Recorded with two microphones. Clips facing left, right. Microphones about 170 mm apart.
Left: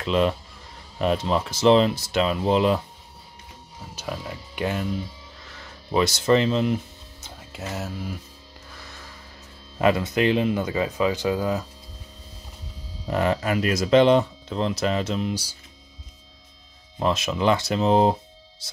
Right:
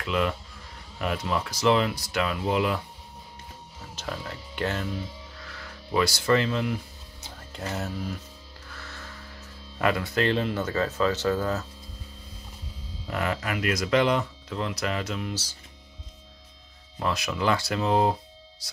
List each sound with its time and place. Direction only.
0.0 s speech: 25° left (ahead or behind)
3.9 s speech: 10° left (ahead or behind)
5.9 s speech: 20° left (ahead or behind)
7.5 s speech: centre (ahead or behind)
9.8 s speech: 20° left (ahead or behind)
13.0 s speech: 30° left (ahead or behind)
17.0 s speech: 20° left (ahead or behind)